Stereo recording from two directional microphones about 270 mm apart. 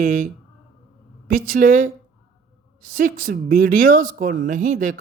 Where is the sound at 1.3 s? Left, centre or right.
Right.